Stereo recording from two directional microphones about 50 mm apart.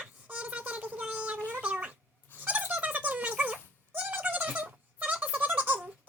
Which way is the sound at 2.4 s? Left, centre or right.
Right.